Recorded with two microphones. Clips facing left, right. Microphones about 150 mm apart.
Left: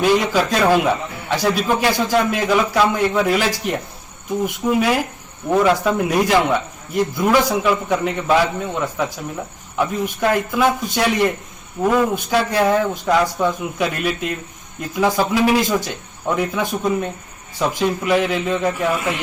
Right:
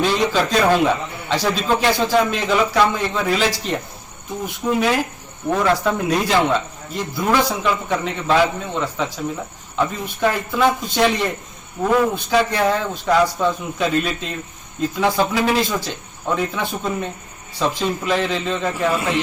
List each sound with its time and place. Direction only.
0.0 s speech: 10° left (ahead or behind)